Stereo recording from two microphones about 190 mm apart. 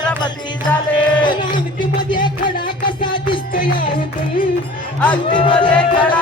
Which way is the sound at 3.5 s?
50° left (ahead or behind).